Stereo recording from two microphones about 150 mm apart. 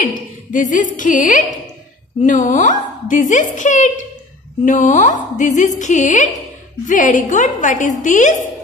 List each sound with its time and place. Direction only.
0.0 s a woman's voice: 60° left (ahead or behind)